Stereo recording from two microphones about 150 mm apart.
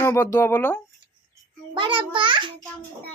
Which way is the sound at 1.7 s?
35° right (ahead or behind).